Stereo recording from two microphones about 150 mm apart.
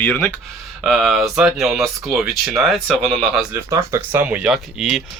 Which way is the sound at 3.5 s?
15° right (ahead or behind).